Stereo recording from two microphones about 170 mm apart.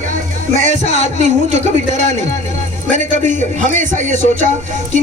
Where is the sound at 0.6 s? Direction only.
45° right (ahead or behind).